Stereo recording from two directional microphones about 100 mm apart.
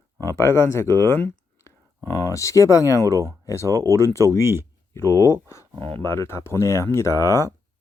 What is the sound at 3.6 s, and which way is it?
Speech, 35° right (ahead or behind).